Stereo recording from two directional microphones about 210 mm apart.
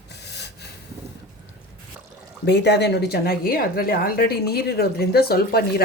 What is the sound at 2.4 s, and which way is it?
A woman's voice, 55° left (ahead or behind).